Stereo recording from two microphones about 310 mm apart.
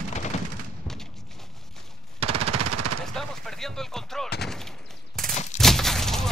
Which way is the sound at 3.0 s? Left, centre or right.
Centre.